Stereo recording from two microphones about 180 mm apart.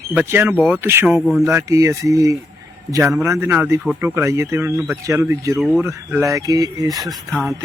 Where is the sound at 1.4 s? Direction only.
15° right (ahead or behind).